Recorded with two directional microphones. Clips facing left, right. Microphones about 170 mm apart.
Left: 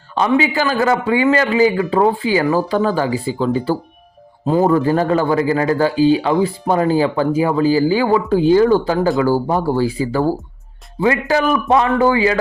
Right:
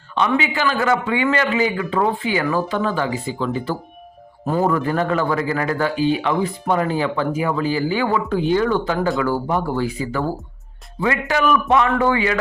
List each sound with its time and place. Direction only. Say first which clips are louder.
0.3 s speech: left 4 dB; 35° left (ahead or behind)